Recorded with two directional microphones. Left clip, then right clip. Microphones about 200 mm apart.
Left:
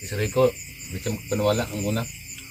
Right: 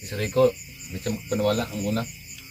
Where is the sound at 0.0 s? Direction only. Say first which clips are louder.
Even; centre (ahead or behind).